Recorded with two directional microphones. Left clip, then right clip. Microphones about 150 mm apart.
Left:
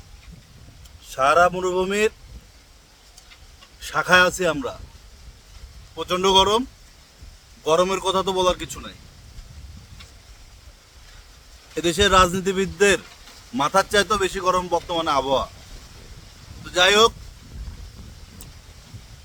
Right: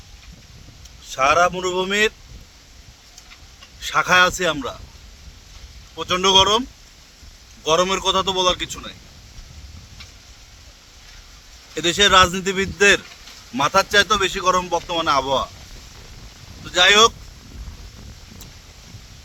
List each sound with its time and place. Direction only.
1.0 s speech: 30° left (ahead or behind)
3.8 s speech: 25° left (ahead or behind)
6.0 s speech: 30° left (ahead or behind)
11.7 s speech: 30° left (ahead or behind)
16.6 s speech: 30° left (ahead or behind)